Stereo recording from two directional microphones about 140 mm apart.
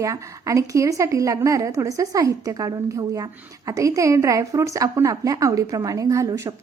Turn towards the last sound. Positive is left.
turn(degrees=-25)  # may be behind; listen again after turning